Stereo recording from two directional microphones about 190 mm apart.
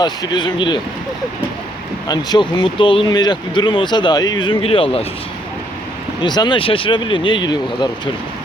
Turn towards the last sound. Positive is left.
turn(degrees=25)  # may be behind; listen again after turning